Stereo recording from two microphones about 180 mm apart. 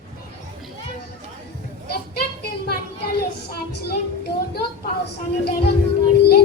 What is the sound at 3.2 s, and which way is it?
Child singing, 60° left (ahead or behind).